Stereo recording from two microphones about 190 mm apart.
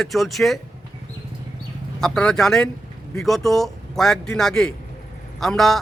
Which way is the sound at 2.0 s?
5° left (ahead or behind).